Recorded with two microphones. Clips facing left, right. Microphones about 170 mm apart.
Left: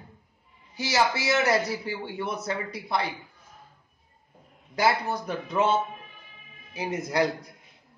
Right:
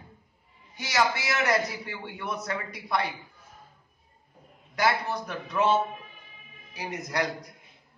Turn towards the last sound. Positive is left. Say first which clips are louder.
# left 5 dB
turn(degrees=30)  # may be behind; listen again after turning